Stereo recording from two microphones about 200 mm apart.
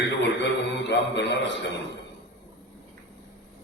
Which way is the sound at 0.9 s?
60° left (ahead or behind).